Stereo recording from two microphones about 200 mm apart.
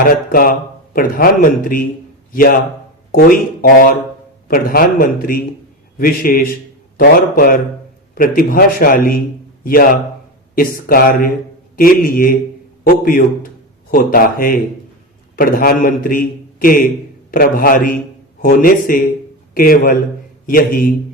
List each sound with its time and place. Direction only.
0.0 s a man's voice: 45° left (ahead or behind)